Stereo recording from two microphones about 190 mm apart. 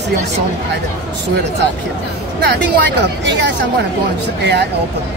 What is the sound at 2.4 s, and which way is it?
Speech, 65° right (ahead or behind).